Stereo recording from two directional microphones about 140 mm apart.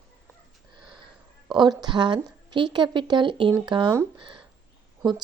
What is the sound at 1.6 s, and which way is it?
A woman's voice, 30° right (ahead or behind).